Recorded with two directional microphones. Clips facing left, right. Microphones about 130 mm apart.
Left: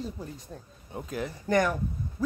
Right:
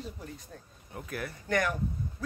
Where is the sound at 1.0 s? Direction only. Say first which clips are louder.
Left 4 dB; 20° left (ahead or behind).